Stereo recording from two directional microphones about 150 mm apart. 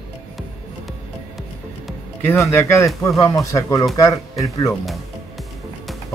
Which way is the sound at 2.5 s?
20° left (ahead or behind).